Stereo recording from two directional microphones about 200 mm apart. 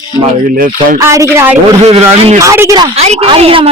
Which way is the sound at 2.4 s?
15° right (ahead or behind).